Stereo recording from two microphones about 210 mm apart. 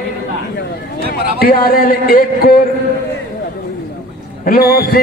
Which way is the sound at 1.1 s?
45° left (ahead or behind).